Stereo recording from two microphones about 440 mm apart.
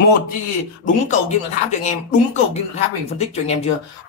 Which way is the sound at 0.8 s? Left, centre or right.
Centre.